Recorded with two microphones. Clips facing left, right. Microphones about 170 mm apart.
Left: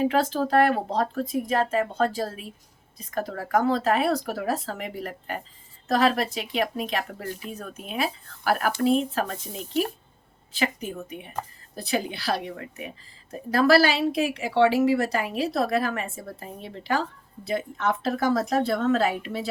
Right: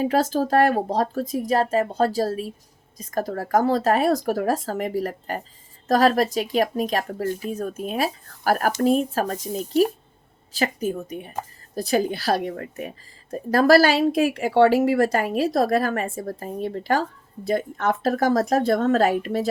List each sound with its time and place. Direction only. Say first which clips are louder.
0.0 s a woman's voice: right 2 dB; 40° right (ahead or behind)